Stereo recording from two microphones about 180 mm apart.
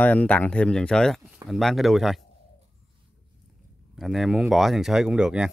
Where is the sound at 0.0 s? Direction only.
10° left (ahead or behind).